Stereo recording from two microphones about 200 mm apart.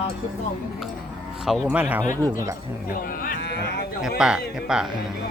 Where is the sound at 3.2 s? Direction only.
50° left (ahead or behind).